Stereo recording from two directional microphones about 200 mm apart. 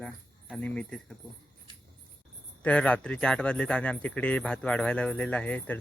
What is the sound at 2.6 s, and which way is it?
Speech, 5° left (ahead or behind).